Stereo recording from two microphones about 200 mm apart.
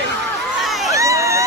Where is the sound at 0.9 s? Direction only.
15° right (ahead or behind).